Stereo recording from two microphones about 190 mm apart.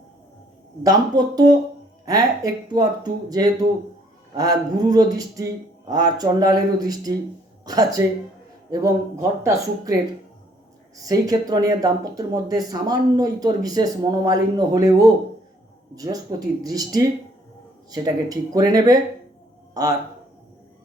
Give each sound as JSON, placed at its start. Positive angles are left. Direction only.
{"t": 0.8, "sound": "speech", "side_deg": -20}
{"t": 16.6, "sound": "a man's voice", "side_deg": -20}